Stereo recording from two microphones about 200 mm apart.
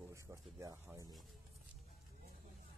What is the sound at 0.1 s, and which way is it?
Speech, 15° right (ahead or behind).